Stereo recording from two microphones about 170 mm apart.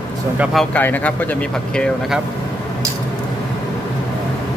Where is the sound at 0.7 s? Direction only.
10° left (ahead or behind).